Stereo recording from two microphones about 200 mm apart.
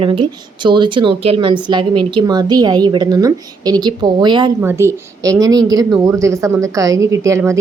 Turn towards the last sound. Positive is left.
turn(degrees=-15)  # may be behind; listen again after turning